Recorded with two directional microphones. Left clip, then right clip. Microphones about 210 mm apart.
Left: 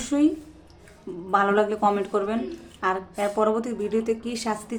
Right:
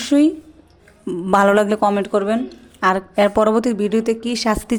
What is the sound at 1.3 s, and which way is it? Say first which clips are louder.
A woman's voice: right 7 dB; 50° right (ahead or behind).